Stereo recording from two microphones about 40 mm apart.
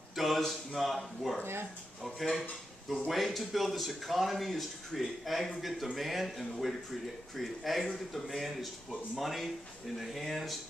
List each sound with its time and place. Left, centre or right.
0.1 s a sound: centre
0.7 s speech: centre
1.4 s speech: right
2.0 s speech: centre